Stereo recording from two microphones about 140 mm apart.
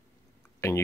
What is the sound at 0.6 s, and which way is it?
Speech, 25° left (ahead or behind).